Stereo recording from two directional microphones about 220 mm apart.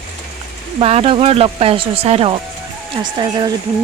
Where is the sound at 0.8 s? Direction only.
25° right (ahead or behind).